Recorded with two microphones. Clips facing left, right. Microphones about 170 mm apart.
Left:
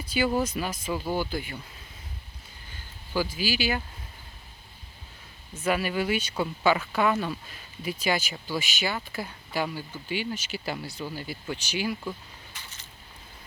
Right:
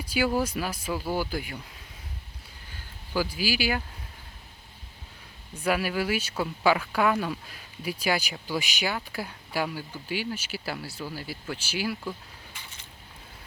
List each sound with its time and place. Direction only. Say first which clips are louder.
0.0 s speech: even; 10° right (ahead or behind)
3.1 s speech: even; 10° right (ahead or behind)
5.5 s speech: even; 10° right (ahead or behind)